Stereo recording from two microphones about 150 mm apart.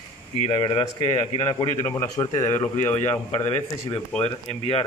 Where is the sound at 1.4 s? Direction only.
25° left (ahead or behind).